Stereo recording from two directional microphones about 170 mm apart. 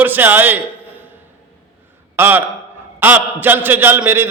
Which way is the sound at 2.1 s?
10° right (ahead or behind).